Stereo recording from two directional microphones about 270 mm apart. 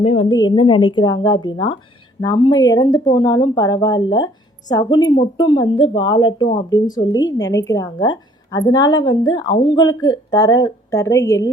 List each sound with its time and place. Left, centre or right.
0.0 s a woman's voice: left